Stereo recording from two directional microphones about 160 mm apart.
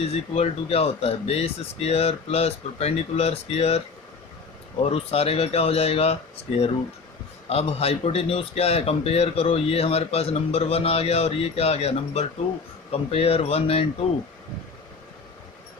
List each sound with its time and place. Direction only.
0.0 s a man's voice: 40° left (ahead or behind)
4.8 s a man's voice: 40° left (ahead or behind)
7.5 s a man's voice: 40° left (ahead or behind)